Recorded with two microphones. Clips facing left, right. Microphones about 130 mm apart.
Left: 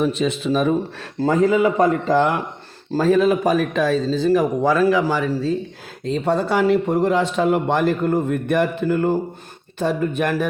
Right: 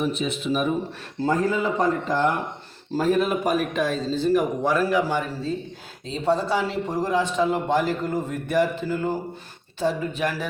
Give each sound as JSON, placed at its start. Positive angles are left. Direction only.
{"t": 0.0, "sound": "speech", "side_deg": 90}
{"t": 6.1, "sound": "a man's voice", "side_deg": 60}